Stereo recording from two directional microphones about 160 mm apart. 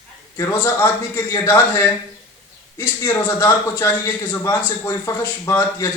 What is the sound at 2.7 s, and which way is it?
A man's voice, 20° left (ahead or behind).